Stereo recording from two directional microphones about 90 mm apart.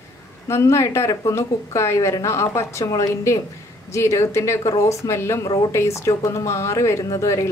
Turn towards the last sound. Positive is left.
turn(degrees=35)  # may be behind; listen again after turning